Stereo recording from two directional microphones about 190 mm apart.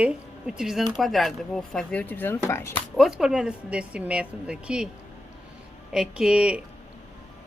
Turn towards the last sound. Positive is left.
turn(degrees=-5)  # may be behind; listen again after turning